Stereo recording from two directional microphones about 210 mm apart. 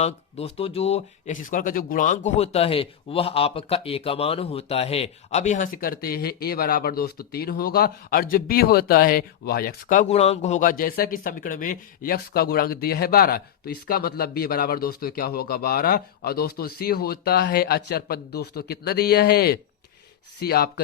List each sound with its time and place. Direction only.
0.0 s speech: 30° left (ahead or behind); by 20.8 s 50° left (ahead or behind)